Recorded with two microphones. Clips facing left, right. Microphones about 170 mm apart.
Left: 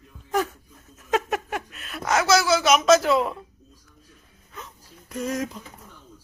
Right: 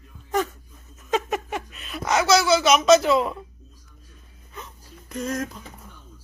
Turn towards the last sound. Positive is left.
turn(degrees=10)  # may be behind; listen again after turning